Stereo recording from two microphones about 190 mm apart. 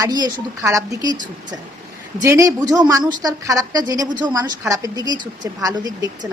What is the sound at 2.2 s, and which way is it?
A woman's voice, 15° right (ahead or behind).